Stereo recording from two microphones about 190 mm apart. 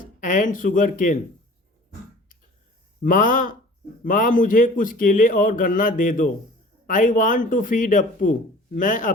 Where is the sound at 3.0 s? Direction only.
45° left (ahead or behind).